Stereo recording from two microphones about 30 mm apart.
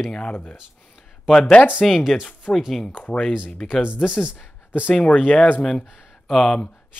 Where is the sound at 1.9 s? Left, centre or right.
Centre.